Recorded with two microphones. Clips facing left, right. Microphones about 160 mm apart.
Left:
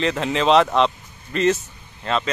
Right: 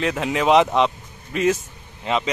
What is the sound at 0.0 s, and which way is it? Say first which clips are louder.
Speech: left 1 dB; 5° right (ahead or behind).